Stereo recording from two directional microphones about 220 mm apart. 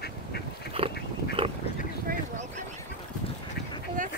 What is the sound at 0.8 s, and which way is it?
Dog, 25° right (ahead or behind).